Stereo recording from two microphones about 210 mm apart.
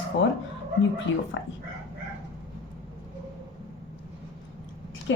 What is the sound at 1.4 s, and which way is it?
Speech, 60° left (ahead or behind).